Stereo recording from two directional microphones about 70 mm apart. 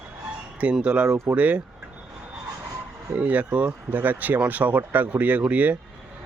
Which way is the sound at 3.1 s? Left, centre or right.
Right.